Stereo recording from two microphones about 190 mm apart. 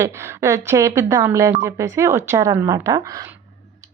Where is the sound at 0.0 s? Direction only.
15° right (ahead or behind).